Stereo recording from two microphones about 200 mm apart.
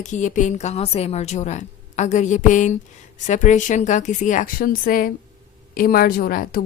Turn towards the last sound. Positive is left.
turn(degrees=45)  # may be behind; listen again after turning